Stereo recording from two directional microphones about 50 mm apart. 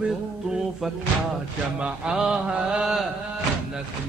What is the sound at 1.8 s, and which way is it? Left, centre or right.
A man's voice, centre.